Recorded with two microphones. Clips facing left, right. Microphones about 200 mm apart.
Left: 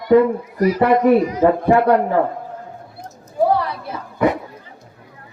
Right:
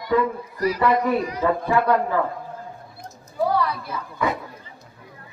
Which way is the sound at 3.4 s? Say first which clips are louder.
Left 6 dB; 50° left (ahead or behind).